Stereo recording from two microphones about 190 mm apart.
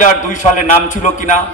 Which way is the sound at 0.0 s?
40° left (ahead or behind).